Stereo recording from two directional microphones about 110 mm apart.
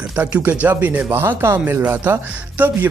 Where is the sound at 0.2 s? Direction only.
15° right (ahead or behind).